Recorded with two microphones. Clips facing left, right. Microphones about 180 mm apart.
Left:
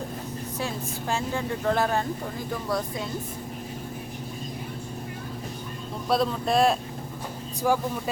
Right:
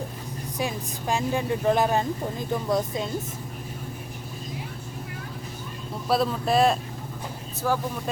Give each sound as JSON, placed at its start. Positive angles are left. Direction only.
{"t": 0.6, "sound": "speech", "side_deg": -15}
{"t": 6.1, "sound": "speech", "side_deg": 0}
{"t": 7.6, "sound": "speech", "side_deg": 10}